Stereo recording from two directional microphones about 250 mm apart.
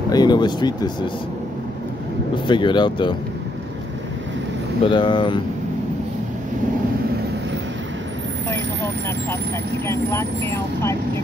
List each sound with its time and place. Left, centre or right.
0.1 s speech: centre
2.3 s speech: centre
4.8 s speech: centre
9.8 s speech: centre